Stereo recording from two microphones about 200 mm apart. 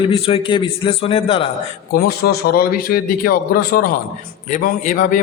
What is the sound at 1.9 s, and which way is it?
A man's voice, 50° left (ahead or behind).